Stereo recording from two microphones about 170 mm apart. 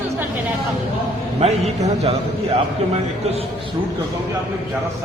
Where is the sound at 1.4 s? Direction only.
40° right (ahead or behind).